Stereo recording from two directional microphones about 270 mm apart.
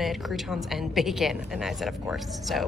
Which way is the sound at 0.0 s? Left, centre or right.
Centre.